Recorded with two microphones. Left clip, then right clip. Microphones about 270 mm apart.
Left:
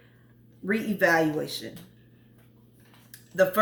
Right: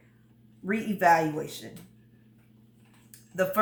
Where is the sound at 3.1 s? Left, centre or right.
Centre.